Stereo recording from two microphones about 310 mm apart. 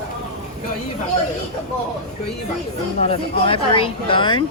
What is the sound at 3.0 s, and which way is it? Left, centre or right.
Speech, centre.